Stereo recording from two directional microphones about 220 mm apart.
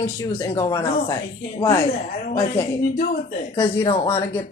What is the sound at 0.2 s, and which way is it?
Speech, 15° left (ahead or behind).